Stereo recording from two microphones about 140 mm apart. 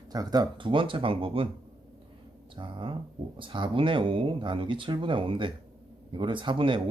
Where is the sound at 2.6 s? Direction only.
35° right (ahead or behind).